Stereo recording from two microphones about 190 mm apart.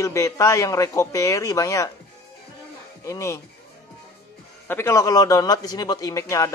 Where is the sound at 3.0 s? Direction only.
15° left (ahead or behind).